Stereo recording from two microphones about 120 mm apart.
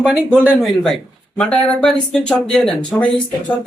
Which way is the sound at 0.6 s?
Centre (ahead or behind).